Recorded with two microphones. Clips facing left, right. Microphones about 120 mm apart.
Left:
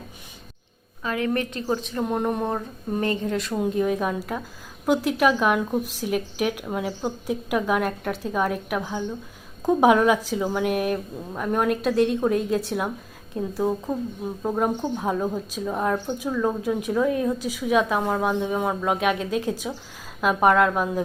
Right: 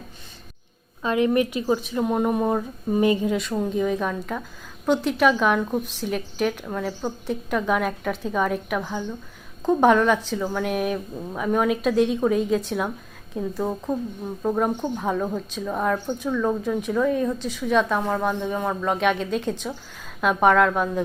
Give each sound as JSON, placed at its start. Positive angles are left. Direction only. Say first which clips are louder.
{"t": 1.0, "sound": "speech", "louder": "right 5 dB", "side_deg": -20}
{"t": 3.3, "sound": "a woman's voice", "louder": "even", "side_deg": 0}